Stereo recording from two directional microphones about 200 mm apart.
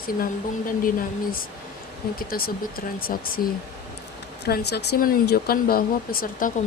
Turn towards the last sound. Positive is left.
turn(degrees=45)  # may be behind; listen again after turning